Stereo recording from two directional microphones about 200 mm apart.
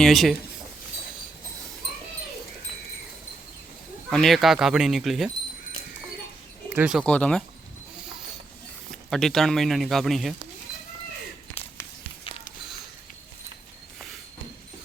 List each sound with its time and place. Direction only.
0.0 s speech: centre (ahead or behind)
4.1 s speech: centre (ahead or behind)
6.7 s speech: 5° right (ahead or behind)
8.9 s speech: centre (ahead or behind)